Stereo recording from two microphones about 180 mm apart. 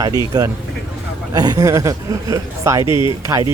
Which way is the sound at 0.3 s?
20° right (ahead or behind).